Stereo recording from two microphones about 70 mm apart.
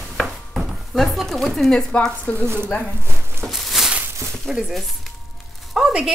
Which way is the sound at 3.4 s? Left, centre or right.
Centre.